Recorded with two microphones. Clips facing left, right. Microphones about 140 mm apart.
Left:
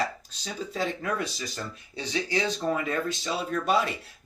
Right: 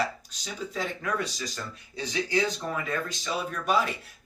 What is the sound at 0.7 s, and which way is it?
Speech, 30° left (ahead or behind).